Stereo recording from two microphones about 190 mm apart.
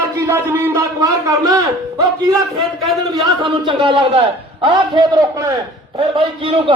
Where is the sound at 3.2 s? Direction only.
25° right (ahead or behind).